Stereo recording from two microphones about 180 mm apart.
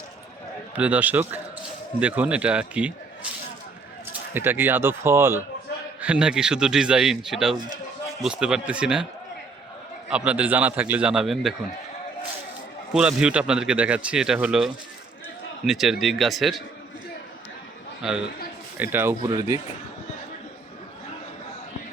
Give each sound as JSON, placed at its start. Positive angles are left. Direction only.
{"t": 0.8, "sound": "a man's voice", "side_deg": -10}
{"t": 4.4, "sound": "a man's voice", "side_deg": -10}
{"t": 10.1, "sound": "a man's voice", "side_deg": -5}
{"t": 12.9, "sound": "speech", "side_deg": -5}
{"t": 18.0, "sound": "a man's voice", "side_deg": 0}